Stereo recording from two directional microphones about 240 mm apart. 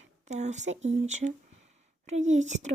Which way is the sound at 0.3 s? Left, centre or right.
Right.